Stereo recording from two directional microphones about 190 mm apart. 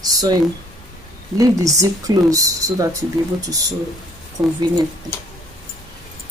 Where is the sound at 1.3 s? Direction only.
20° right (ahead or behind).